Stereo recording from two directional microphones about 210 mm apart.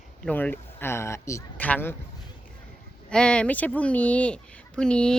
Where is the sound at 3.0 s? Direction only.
5° left (ahead or behind).